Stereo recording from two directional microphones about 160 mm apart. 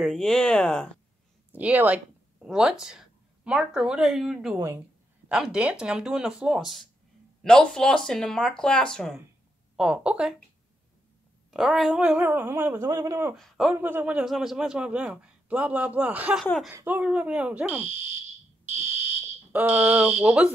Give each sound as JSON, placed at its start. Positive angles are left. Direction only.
{"t": 0.0, "sound": "speech", "side_deg": 0}
{"t": 1.5, "sound": "a man's voice", "side_deg": -10}
{"t": 4.6, "sound": "speech", "side_deg": -20}
{"t": 5.3, "sound": "speech", "side_deg": -5}
{"t": 11.5, "sound": "a man's voice", "side_deg": 0}
{"t": 13.4, "sound": "speech", "side_deg": 0}
{"t": 13.7, "sound": "a man's voice", "side_deg": -10}
{"t": 18.7, "sound": "fire alarm", "side_deg": -45}
{"t": 19.5, "sound": "a man's voice", "side_deg": -10}